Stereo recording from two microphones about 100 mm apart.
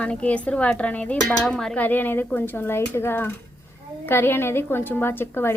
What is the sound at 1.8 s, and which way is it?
Speech, 20° left (ahead or behind).